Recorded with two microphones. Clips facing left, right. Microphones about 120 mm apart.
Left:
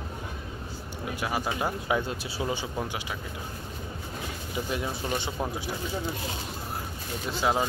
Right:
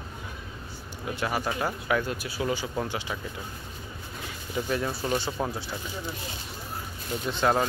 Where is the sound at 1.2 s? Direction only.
10° left (ahead or behind); by 2.4 s 25° left (ahead or behind).